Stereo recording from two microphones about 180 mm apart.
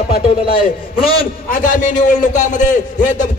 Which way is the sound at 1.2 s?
45° left (ahead or behind).